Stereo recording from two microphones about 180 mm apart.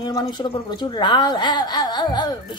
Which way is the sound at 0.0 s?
25° left (ahead or behind).